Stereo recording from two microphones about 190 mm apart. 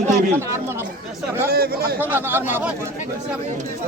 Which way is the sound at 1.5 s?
55° right (ahead or behind).